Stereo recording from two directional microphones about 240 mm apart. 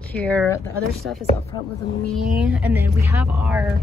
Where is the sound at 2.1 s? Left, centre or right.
Centre.